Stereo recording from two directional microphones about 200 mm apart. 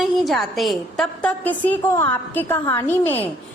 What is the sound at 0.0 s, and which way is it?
A woman's voice, centre (ahead or behind).